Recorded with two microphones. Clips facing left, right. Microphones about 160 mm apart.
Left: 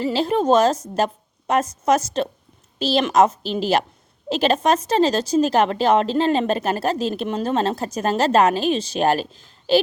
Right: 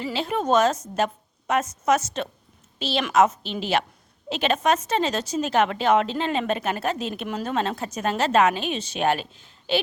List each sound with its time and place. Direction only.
0.0 s a woman's voice: 35° left (ahead or behind)
0.9 s a sound: 35° left (ahead or behind)
1.8 s a woman's voice: 35° left (ahead or behind)